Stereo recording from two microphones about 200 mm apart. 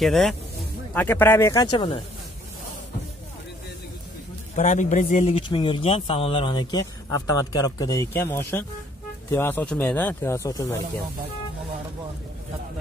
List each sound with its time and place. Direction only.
0.0 s speech: centre (ahead or behind); by 2.0 s 20° left (ahead or behind)
4.6 s a man's voice: 40° left (ahead or behind); by 10.8 s 15° left (ahead or behind)